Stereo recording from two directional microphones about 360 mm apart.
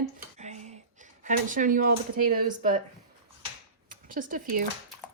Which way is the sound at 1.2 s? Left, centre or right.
Right.